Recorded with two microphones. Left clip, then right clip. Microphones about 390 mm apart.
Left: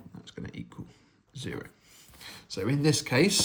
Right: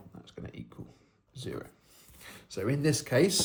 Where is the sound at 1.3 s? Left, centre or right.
Centre.